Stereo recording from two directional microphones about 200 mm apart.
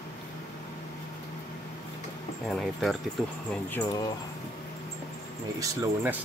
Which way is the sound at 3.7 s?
15° left (ahead or behind).